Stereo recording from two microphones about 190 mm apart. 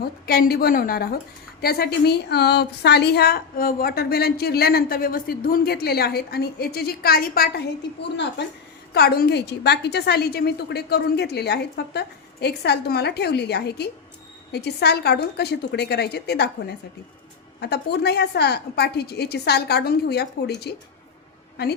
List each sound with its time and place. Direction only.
0.3 s a woman's voice: 55° left (ahead or behind)
8.1 s a woman's voice: 65° left (ahead or behind)